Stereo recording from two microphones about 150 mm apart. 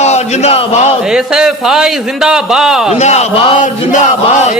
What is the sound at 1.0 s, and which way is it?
Speech, 5° right (ahead or behind).